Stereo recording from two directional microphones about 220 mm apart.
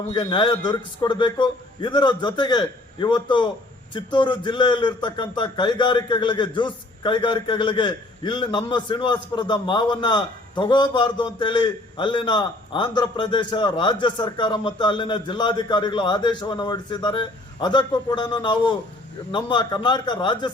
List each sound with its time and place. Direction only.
0.1 s a man's voice: 20° left (ahead or behind)